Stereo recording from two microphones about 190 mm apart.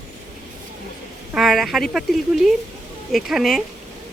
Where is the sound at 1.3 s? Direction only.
Centre (ahead or behind).